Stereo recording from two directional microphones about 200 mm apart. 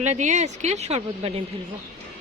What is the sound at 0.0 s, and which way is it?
A woman's voice, 35° right (ahead or behind).